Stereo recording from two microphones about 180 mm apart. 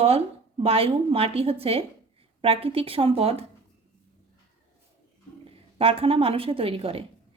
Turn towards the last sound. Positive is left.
turn(degrees=-30)  # may be behind; listen again after turning